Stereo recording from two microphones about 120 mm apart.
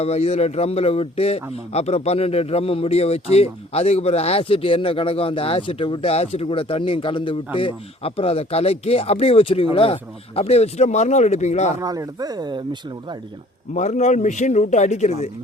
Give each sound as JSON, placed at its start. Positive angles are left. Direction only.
{"t": 0.0, "sound": "a man's voice", "side_deg": 60}
{"t": 11.8, "sound": "speech", "side_deg": -30}
{"t": 13.7, "sound": "a man's voice", "side_deg": 80}